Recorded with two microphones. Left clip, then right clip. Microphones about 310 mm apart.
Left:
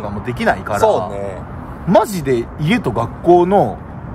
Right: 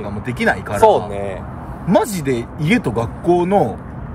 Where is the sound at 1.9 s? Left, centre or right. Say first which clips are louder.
Left 3 dB; centre.